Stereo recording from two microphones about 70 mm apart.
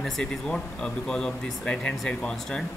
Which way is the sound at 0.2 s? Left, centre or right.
Centre.